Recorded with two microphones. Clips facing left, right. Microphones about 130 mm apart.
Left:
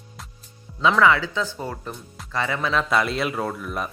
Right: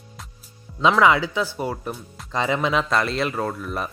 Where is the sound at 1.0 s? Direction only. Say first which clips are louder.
Even; 15° right (ahead or behind).